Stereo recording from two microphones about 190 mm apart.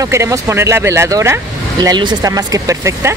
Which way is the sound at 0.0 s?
15° right (ahead or behind).